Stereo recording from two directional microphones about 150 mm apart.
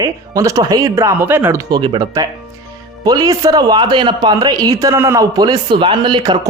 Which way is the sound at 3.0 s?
25° right (ahead or behind).